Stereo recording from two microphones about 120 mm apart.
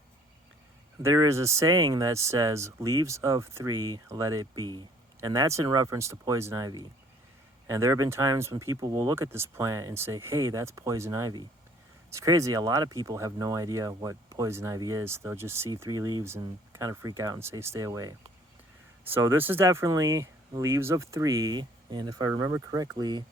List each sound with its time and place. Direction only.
1.0 s speech: 25° right (ahead or behind)
22.4 s speech: 25° right (ahead or behind)